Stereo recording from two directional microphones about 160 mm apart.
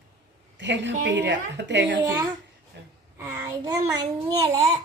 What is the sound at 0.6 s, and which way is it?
A woman's voice, 90° right.